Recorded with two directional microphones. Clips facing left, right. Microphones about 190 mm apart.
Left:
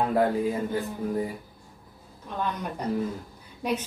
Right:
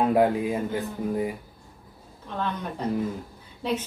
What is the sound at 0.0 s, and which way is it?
Speech, 15° right (ahead or behind).